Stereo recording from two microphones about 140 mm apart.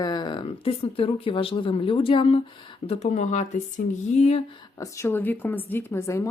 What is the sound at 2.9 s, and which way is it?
Speech, 50° left (ahead or behind).